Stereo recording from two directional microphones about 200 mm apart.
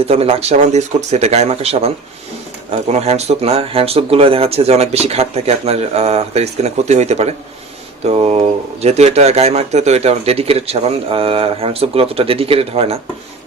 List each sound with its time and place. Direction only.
0.0 s speech: 30° right (ahead or behind)